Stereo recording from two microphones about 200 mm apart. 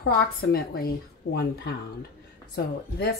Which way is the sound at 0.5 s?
50° left (ahead or behind).